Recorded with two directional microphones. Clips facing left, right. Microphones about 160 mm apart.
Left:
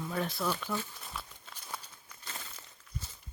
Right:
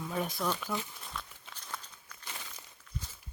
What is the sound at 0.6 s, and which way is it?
Speech, 10° right (ahead or behind).